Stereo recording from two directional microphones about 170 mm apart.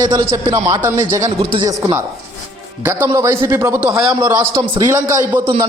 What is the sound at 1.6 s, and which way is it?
A man's voice, 20° right (ahead or behind).